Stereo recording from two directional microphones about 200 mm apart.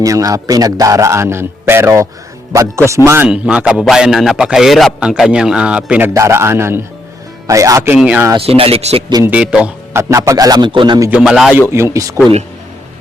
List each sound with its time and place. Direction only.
0.0 s a man's voice: 15° right (ahead or behind)
8.4 s a man's voice: 30° right (ahead or behind)
9.2 s a man's voice: 5° right (ahead or behind); by 11.1 s 20° right (ahead or behind)
11.1 s a man's voice: centre (ahead or behind)